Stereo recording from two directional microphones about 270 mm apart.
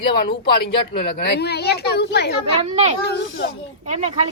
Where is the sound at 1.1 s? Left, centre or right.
Left.